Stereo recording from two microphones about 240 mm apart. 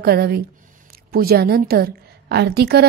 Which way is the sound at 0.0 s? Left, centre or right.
Right.